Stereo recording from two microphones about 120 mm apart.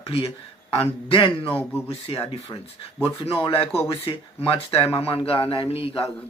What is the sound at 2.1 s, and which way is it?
A man's voice, 45° left (ahead or behind).